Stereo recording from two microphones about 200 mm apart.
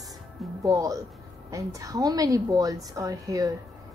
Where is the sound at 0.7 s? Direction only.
15° right (ahead or behind).